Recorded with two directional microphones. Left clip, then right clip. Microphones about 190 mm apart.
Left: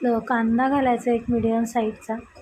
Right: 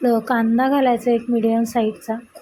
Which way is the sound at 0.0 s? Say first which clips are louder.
Right 4 dB; 20° right (ahead or behind).